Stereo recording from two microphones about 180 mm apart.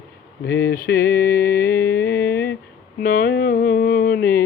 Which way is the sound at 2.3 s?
10° left (ahead or behind).